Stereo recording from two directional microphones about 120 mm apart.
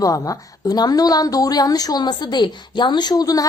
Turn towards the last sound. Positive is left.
turn(degrees=30)  # may be behind; listen again after turning